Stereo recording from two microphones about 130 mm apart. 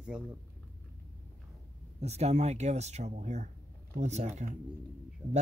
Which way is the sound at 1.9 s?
55° right (ahead or behind).